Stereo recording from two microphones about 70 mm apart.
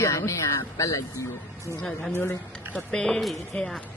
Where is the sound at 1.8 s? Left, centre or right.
Centre.